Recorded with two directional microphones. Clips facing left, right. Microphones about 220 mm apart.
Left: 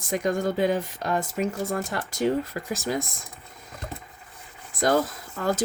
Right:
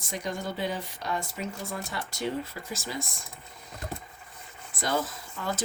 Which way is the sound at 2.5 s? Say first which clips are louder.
Left 7 dB; 65° left (ahead or behind).